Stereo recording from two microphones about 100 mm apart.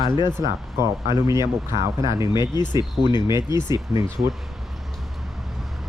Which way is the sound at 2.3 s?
45° left (ahead or behind).